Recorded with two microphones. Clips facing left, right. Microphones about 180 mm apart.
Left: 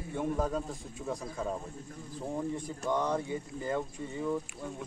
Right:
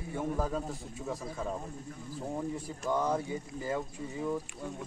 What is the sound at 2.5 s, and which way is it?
Speech, 5° right (ahead or behind).